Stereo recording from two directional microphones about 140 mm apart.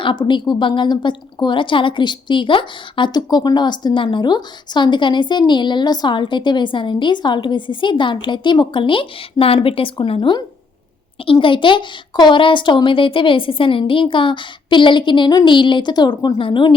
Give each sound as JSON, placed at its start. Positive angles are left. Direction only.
{"t": 0.0, "sound": "a woman's voice", "side_deg": 35}